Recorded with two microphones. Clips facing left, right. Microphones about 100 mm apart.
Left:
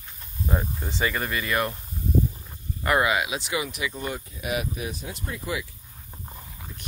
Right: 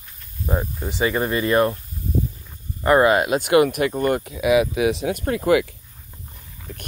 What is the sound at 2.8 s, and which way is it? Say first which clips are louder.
Speech: right 7 dB; 40° right (ahead or behind).